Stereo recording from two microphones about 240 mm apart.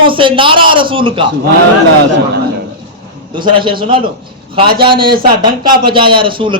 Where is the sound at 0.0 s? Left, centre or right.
Right.